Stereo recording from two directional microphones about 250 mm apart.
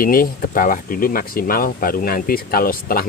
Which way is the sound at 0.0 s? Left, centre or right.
Left.